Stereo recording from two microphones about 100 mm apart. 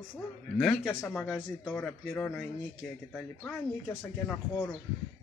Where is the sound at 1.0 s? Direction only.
10° left (ahead or behind).